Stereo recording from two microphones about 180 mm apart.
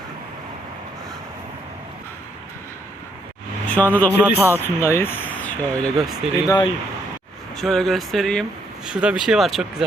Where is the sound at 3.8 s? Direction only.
5° left (ahead or behind).